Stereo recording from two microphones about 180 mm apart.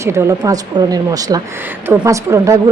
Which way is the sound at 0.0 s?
15° right (ahead or behind).